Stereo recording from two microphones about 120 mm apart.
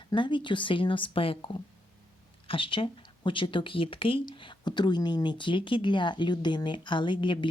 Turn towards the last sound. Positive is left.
turn(degrees=45)  # may be behind; listen again after turning